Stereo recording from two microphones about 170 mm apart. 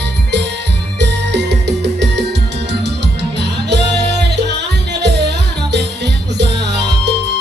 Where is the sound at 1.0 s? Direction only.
90° right.